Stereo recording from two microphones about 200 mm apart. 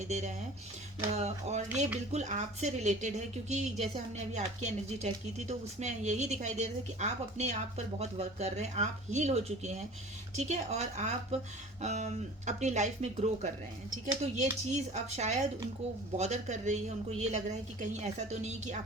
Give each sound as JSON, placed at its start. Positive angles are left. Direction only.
{"t": 0.0, "sound": "a woman's voice", "side_deg": -35}